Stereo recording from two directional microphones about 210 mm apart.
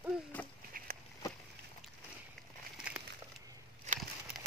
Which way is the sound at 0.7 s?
45° right (ahead or behind).